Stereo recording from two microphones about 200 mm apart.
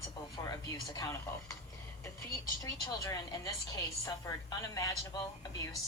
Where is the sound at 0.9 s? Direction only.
15° left (ahead or behind).